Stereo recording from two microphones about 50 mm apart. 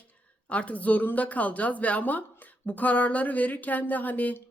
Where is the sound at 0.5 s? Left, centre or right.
Left.